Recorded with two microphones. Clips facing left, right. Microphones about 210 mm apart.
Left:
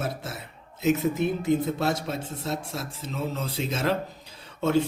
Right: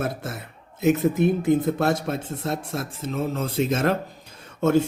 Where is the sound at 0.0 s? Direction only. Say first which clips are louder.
Right 4 dB; 55° right (ahead or behind).